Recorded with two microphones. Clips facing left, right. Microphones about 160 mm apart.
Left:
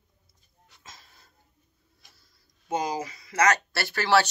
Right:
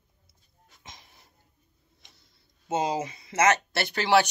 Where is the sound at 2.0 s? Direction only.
25° right (ahead or behind).